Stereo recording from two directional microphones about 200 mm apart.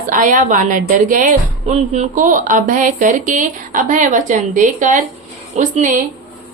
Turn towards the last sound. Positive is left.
turn(degrees=-35)  # may be behind; listen again after turning